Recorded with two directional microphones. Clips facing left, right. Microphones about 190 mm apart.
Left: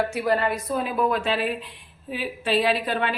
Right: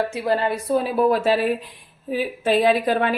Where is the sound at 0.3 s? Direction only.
30° right (ahead or behind).